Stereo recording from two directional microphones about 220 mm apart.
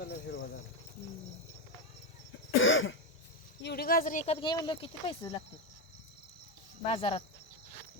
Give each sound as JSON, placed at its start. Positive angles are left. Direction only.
{"t": 0.0, "sound": "insect", "side_deg": 50}
{"t": 2.6, "sound": "cough", "side_deg": 60}
{"t": 3.6, "sound": "speech", "side_deg": 45}
{"t": 6.8, "sound": "speech", "side_deg": 25}